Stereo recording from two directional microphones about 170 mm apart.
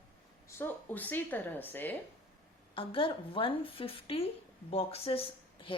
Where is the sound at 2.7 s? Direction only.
30° left (ahead or behind).